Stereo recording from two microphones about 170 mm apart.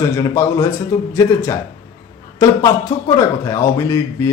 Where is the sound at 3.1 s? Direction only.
20° left (ahead or behind).